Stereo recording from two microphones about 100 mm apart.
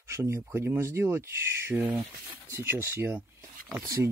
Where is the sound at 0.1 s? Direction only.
25° right (ahead or behind).